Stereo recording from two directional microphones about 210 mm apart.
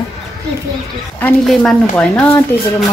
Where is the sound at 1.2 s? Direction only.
5° left (ahead or behind).